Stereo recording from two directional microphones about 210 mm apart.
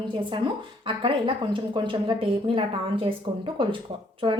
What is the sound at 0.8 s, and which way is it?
A woman's voice, 25° right (ahead or behind).